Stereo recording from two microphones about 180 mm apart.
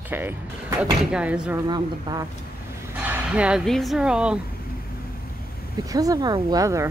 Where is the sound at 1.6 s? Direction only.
25° right (ahead or behind).